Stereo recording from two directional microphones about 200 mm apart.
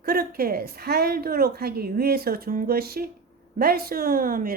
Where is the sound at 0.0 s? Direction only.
50° right (ahead or behind).